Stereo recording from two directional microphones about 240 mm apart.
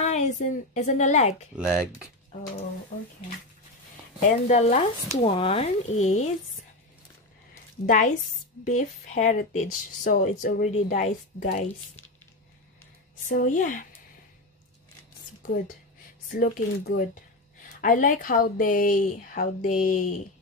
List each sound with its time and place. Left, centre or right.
0.0 s a woman's voice: left
1.6 s speech: centre
4.3 s a woman's voice: left
7.8 s speech: left
13.3 s speech: left
16.3 s speech: left